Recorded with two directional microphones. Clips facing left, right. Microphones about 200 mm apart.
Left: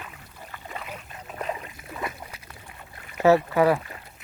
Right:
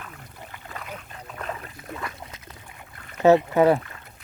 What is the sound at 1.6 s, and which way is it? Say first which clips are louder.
Boat: left 1 dB; 15° left (ahead or behind).